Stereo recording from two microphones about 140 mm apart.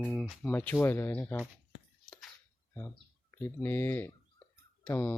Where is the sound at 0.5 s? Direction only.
15° left (ahead or behind).